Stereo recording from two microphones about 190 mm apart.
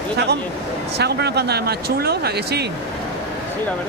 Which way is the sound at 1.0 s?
60° right (ahead or behind).